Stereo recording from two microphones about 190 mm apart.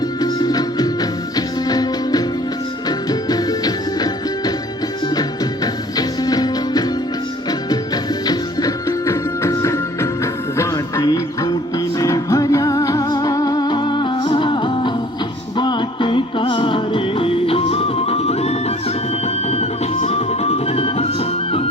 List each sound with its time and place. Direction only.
0.2 s music: 20° left (ahead or behind)
6.0 s music: 20° left (ahead or behind)
8.3 s music: 20° left (ahead or behind)